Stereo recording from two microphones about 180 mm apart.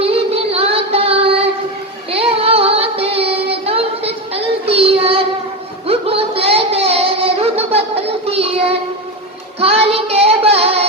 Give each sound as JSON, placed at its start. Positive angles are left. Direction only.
{"t": 0.0, "sound": "child singing", "side_deg": -35}
{"t": 5.9, "sound": "a sound", "side_deg": -30}
{"t": 9.6, "sound": "child singing", "side_deg": -35}